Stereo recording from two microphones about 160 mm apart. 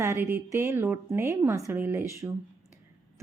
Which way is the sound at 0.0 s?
15° right (ahead or behind).